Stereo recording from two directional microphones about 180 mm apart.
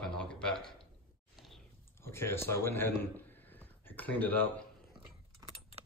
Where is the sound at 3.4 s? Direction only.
10° left (ahead or behind).